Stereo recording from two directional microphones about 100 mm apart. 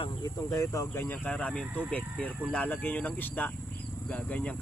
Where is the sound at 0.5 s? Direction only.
35° left (ahead or behind).